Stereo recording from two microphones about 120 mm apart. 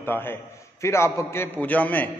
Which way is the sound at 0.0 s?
20° left (ahead or behind).